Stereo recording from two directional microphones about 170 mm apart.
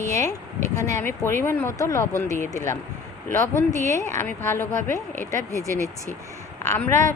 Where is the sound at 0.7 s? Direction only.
15° left (ahead or behind).